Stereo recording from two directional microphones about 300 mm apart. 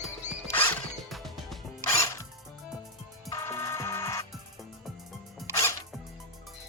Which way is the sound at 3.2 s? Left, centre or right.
Centre.